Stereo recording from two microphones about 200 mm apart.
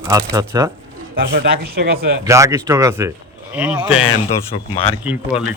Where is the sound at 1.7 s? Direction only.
50° right (ahead or behind).